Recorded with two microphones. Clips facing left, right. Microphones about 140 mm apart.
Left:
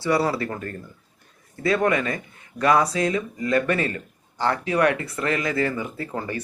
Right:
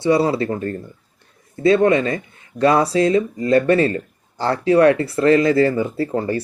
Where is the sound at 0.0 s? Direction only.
25° right (ahead or behind).